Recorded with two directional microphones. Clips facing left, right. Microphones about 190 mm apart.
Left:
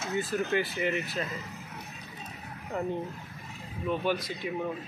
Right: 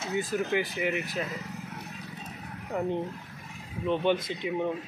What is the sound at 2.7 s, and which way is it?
Speech, 15° right (ahead or behind).